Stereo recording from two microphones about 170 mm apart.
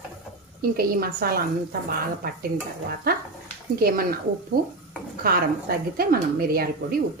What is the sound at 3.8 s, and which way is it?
A woman's voice, 60° right (ahead or behind).